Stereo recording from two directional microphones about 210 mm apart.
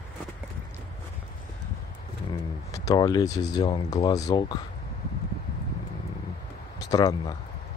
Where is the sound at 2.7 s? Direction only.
15° left (ahead or behind).